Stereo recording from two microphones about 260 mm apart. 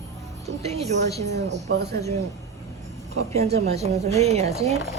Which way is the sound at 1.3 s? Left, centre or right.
Right.